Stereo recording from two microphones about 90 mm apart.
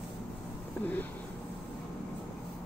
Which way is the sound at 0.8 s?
20° left (ahead or behind).